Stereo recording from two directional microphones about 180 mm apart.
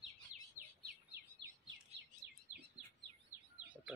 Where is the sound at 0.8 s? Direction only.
65° right (ahead or behind).